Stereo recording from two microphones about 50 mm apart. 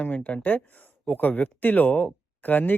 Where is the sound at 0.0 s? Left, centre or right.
Left.